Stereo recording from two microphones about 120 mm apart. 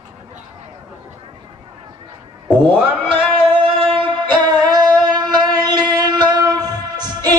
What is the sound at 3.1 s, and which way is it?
Singing, 45° right (ahead or behind).